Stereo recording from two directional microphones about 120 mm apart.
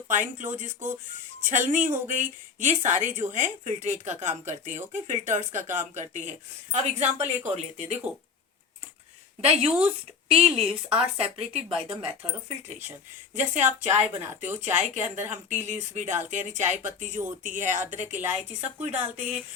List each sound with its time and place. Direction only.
0.1 s speech: 90° right; by 7.9 s 65° right (ahead or behind)
9.4 s speech: 60° right (ahead or behind)
13.3 s speech: 85° right
13.9 s speech: 20° right (ahead or behind)
14.6 s speech: 70° right (ahead or behind)
18.2 s a woman's voice: 20° right (ahead or behind)
18.8 s speech: 70° right (ahead or behind)